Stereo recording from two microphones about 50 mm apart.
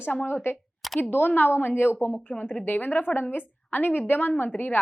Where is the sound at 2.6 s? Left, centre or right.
Left.